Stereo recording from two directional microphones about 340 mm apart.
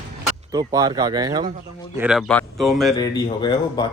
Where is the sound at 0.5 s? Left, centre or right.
Centre.